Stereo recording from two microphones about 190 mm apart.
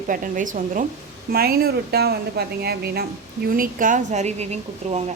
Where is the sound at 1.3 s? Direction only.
55° right (ahead or behind).